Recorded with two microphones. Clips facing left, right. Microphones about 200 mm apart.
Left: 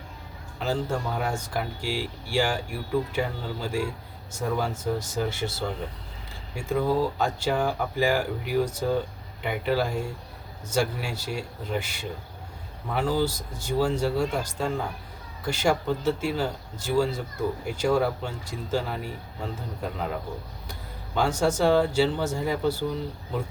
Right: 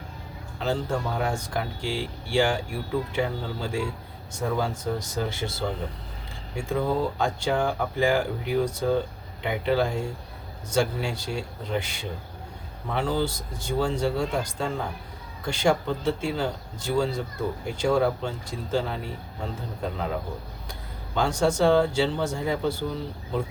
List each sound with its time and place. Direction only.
0.6 s speech: 5° left (ahead or behind)
21.2 s speech: 5° left (ahead or behind)